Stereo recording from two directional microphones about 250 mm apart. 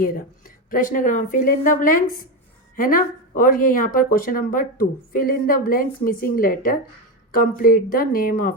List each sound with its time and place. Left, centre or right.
0.0 s speech: left